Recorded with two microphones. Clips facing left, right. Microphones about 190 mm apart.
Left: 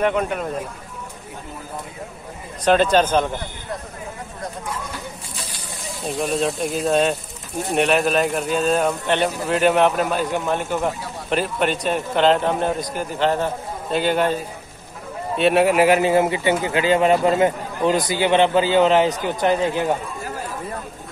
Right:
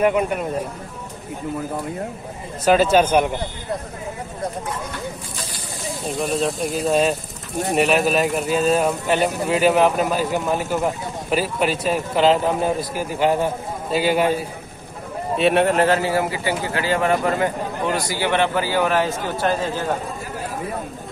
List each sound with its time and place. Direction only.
0.0 s speech: 5° right (ahead or behind)
2.6 s speech: 5° right (ahead or behind)
6.0 s speech: centre (ahead or behind); by 19.9 s 20° left (ahead or behind)